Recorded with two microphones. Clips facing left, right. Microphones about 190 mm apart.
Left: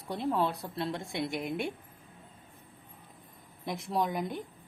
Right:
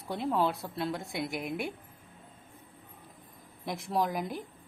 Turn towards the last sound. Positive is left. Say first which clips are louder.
# even
turn(degrees=0)  # may be behind; listen again after turning